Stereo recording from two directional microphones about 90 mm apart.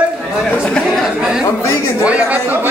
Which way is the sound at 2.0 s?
15° right (ahead or behind).